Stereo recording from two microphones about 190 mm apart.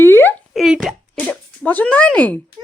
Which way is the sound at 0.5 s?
Centre (ahead or behind).